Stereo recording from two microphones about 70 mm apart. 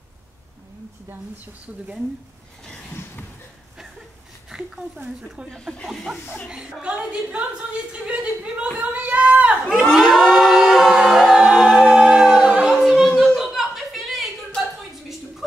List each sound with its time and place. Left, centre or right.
4.5 s a woman's voice: centre
6.5 s a woman's voice: centre
9.7 s choir: centre
12.7 s music: centre
13.4 s a sound: centre